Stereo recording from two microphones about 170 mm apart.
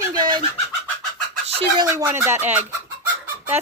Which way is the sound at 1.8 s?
20° right (ahead or behind).